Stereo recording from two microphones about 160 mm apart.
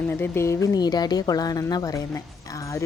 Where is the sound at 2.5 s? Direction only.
20° left (ahead or behind).